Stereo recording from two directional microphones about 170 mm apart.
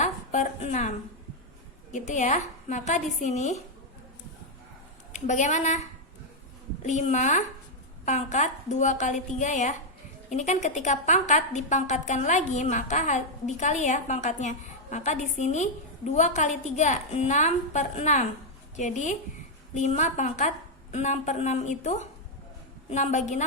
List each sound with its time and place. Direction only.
0.0 s a sound: 40° left (ahead or behind)
1.9 s a woman's voice: 45° left (ahead or behind)
5.1 s a woman's voice: 45° left (ahead or behind)